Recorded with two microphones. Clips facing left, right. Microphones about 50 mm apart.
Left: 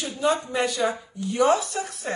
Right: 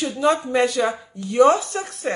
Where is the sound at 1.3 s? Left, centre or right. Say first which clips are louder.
Right 5 dB; right.